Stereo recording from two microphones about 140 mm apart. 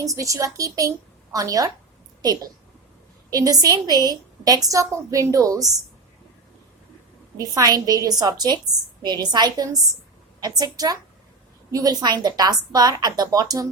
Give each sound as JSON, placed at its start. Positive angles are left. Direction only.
{"t": 0.0, "sound": "a woman's voice", "side_deg": -25}
{"t": 7.3, "sound": "a woman's voice", "side_deg": -25}